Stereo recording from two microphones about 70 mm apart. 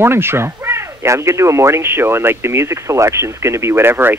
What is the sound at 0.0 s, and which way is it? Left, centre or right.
Speech, right.